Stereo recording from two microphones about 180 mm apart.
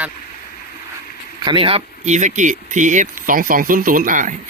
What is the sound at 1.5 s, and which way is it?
Speech, 30° right (ahead or behind).